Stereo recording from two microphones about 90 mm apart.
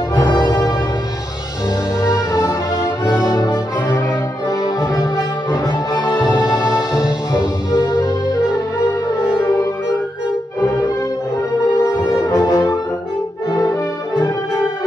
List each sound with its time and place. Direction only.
0.1 s music: 55° left (ahead or behind)
2.0 s music: 40° left (ahead or behind)
3.2 s brass instrument: 45° left (ahead or behind)
4.5 s music: 40° left (ahead or behind)
12.3 s brass instrument: 40° left (ahead or behind)